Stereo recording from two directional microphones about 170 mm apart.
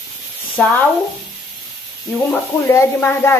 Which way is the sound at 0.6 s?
5° left (ahead or behind).